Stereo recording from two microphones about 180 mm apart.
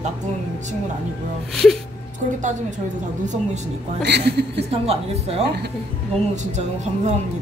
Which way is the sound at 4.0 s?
70° right (ahead or behind).